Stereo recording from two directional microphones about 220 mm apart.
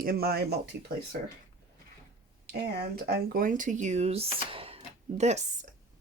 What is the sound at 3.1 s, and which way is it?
Speech, 45° right (ahead or behind).